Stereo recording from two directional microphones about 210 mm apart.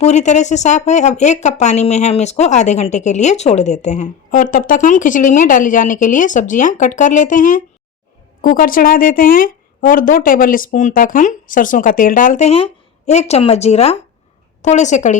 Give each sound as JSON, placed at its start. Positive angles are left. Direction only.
{"t": 0.0, "sound": "speech", "side_deg": 35}